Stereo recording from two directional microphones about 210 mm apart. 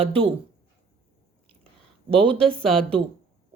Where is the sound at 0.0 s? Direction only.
25° right (ahead or behind).